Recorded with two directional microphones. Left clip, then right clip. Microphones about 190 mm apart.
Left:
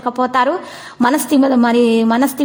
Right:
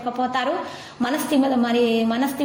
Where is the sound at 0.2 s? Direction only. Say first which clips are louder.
Left 8 dB; 40° left (ahead or behind).